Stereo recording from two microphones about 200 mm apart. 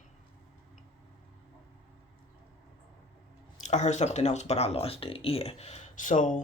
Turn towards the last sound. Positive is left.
turn(degrees=40)  # may be behind; listen again after turning